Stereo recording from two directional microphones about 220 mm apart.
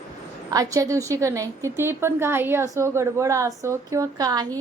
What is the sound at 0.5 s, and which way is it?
Speech, 15° right (ahead or behind).